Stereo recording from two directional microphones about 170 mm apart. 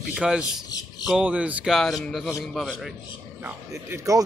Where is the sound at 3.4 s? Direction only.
15° right (ahead or behind).